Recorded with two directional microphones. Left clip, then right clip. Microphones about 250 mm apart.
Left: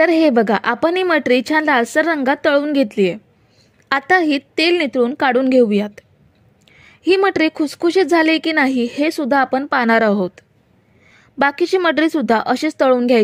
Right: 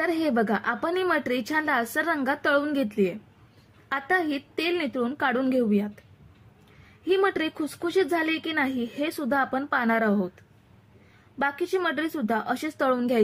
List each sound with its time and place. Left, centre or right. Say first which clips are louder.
0.0 s a woman's voice: left 12 dB; left
7.1 s a woman's voice: left 9 dB; left